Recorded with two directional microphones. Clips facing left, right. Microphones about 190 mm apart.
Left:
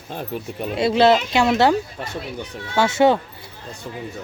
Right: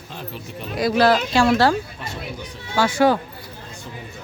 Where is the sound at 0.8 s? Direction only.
25° left (ahead or behind).